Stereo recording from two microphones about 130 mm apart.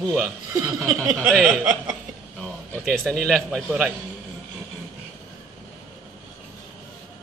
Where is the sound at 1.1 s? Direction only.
10° left (ahead or behind).